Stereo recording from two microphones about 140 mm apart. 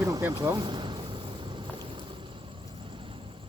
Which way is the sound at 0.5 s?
30° right (ahead or behind).